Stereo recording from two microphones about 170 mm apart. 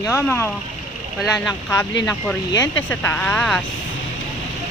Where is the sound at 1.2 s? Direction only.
Centre (ahead or behind).